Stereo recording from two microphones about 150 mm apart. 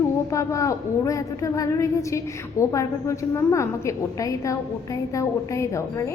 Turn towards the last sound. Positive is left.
turn(degrees=20)  # may be behind; listen again after turning